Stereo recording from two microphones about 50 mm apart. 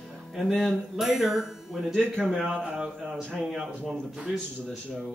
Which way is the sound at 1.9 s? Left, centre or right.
Centre.